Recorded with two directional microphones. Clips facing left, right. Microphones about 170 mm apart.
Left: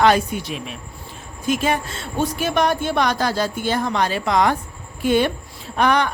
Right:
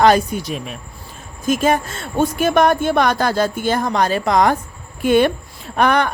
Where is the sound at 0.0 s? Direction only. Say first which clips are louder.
Right 3 dB; 40° right (ahead or behind).